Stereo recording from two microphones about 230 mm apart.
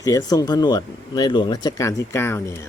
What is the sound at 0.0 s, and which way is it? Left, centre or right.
Speech, centre.